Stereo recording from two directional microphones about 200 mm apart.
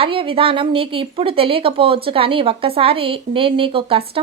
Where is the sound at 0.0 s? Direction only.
25° right (ahead or behind).